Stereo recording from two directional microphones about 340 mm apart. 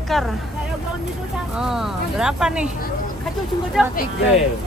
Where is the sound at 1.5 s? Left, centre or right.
Centre.